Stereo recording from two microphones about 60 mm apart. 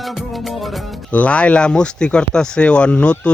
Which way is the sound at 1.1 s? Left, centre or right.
Left.